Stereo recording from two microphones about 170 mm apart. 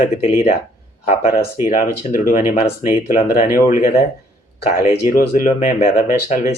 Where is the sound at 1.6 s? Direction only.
50° left (ahead or behind).